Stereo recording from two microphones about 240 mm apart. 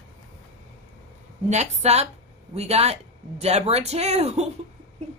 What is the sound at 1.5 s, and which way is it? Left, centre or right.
Speech, right.